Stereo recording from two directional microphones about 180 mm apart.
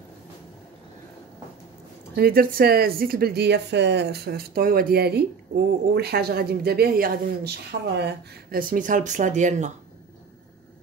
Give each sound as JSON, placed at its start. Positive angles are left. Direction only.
{"t": 2.1, "sound": "speech", "side_deg": -60}